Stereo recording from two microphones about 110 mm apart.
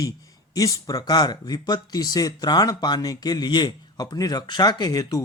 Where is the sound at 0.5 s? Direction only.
35° left (ahead or behind).